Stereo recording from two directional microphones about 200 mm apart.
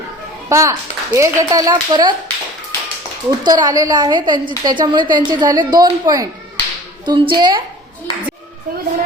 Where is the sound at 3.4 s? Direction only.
20° right (ahead or behind).